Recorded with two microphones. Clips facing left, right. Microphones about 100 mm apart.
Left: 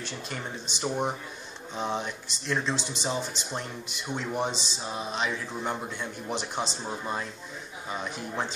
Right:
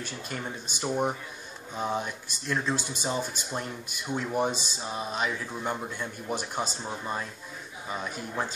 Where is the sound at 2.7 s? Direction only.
50° right (ahead or behind).